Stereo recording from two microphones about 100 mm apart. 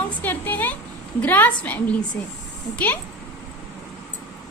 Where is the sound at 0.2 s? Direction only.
15° left (ahead or behind).